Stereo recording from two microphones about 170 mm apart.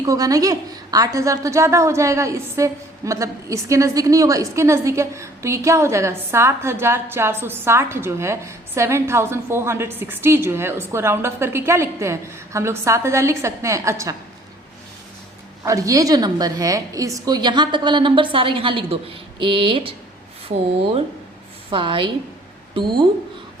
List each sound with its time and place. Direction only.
0.0 s a woman's voice: 20° right (ahead or behind)
15.6 s a woman's voice: 20° right (ahead or behind)
21.7 s a woman's voice: 30° right (ahead or behind)